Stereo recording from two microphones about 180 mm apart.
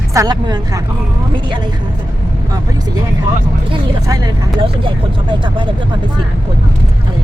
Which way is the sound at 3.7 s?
20° right (ahead or behind).